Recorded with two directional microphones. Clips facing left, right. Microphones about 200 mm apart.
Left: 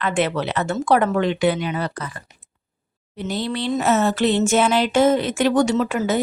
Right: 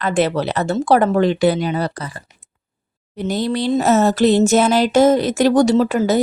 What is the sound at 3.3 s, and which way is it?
Speech, 40° right (ahead or behind).